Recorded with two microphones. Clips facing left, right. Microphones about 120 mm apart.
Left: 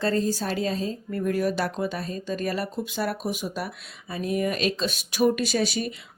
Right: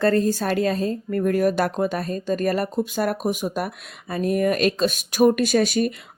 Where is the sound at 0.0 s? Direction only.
55° right (ahead or behind).